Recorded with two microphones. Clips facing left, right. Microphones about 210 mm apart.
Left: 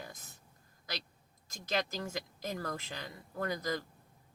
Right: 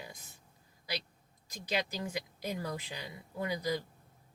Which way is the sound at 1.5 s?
15° right (ahead or behind).